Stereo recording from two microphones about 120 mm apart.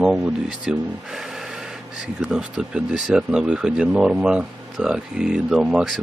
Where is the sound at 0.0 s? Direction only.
5° right (ahead or behind).